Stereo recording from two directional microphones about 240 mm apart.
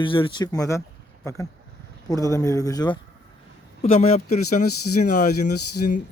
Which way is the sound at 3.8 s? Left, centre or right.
Left.